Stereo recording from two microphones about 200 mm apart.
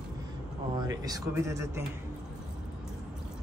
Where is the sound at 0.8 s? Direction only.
20° right (ahead or behind).